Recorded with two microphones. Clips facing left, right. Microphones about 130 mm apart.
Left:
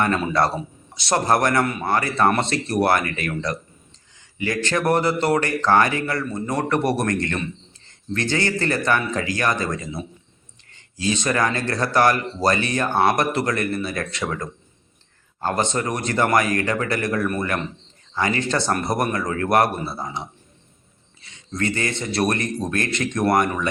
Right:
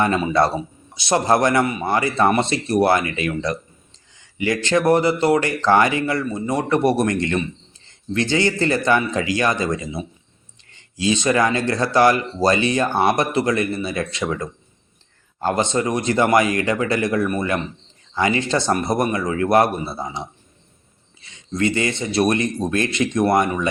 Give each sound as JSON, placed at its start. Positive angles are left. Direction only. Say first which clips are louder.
{"t": 0.0, "sound": "speech", "louder": "right 2 dB", "side_deg": -20}
{"t": 21.5, "sound": "speech", "louder": "right 4 dB", "side_deg": -20}